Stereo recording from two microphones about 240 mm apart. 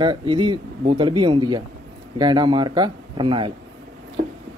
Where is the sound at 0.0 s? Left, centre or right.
Centre.